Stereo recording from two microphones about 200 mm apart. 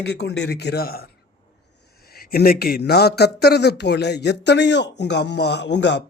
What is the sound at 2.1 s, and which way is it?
Speech, 50° left (ahead or behind).